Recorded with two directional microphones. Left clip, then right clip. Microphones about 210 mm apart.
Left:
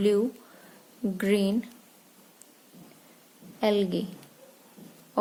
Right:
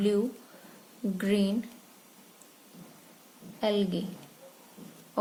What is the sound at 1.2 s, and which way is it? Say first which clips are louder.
Speech: left 3 dB; 35° left (ahead or behind).